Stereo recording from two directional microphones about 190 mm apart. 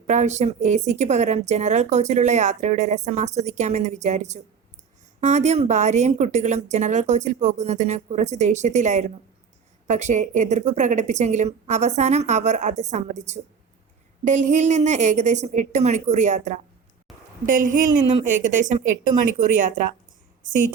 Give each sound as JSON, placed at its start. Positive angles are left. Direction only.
{"t": 0.1, "sound": "speech", "side_deg": -35}
{"t": 17.1, "sound": "a sound", "side_deg": 0}
{"t": 17.4, "sound": "a woman's voice", "side_deg": -45}